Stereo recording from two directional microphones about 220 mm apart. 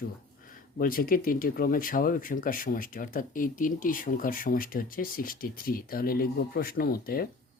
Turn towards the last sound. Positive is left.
turn(degrees=40)  # may be behind; listen again after turning